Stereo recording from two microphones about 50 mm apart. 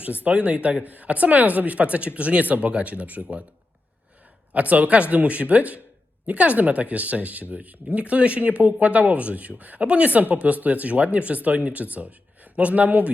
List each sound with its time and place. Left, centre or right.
0.3 s speech: right
4.5 s speech: right